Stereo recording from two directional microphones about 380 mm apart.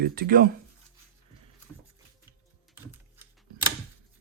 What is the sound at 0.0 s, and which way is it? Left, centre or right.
Speech, right.